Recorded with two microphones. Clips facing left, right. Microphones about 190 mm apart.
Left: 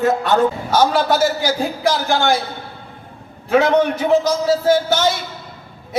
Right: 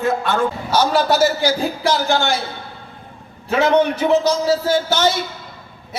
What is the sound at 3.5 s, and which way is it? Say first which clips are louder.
A man's voice: left 1 dB; 50° left (ahead or behind).